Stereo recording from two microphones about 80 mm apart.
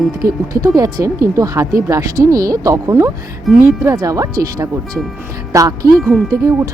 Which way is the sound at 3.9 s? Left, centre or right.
Right.